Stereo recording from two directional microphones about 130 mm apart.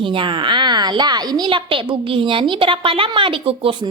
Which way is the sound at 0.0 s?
40° right (ahead or behind).